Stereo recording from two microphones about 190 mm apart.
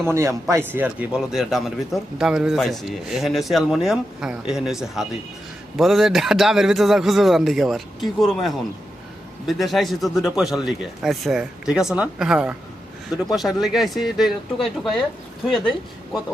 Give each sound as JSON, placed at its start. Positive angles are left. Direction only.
{"t": 0.1, "sound": "a man's voice", "side_deg": -15}